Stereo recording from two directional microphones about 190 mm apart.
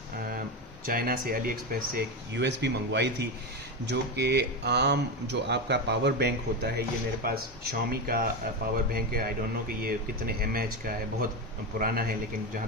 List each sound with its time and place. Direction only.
0.9 s speech: 50° right (ahead or behind)
2.0 s speech: 65° right (ahead or behind)